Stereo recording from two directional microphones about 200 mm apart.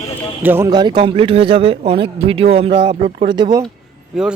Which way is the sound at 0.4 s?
15° right (ahead or behind).